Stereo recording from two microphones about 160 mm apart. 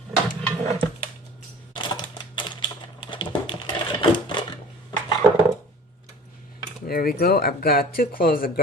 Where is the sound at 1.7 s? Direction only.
30° left (ahead or behind).